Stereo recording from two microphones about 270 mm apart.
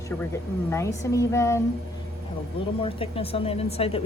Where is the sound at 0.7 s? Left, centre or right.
Centre.